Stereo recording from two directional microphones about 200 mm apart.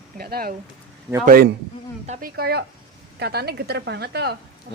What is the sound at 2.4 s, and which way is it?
Speech, 50° right (ahead or behind).